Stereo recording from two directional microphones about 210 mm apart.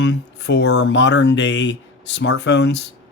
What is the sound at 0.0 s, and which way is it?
Speech, 55° left (ahead or behind).